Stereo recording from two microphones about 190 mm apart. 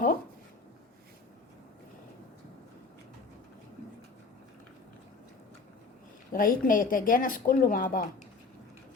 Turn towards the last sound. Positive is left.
turn(degrees=45)  # may be behind; listen again after turning